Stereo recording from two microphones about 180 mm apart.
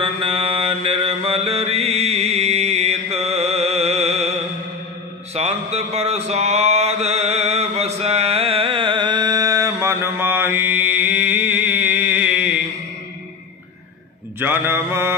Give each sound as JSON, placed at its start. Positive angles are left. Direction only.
{"t": 0.0, "sound": "mantra", "side_deg": -30}
{"t": 14.4, "sound": "mantra", "side_deg": -10}